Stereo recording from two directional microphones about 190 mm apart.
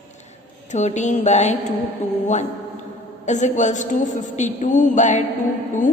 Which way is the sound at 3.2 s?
40° left (ahead or behind).